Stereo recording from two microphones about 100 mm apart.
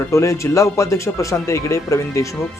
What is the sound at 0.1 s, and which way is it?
Speech, 30° left (ahead or behind).